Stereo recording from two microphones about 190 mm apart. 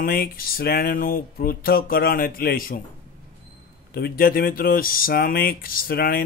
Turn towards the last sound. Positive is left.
turn(degrees=50)  # may be behind; listen again after turning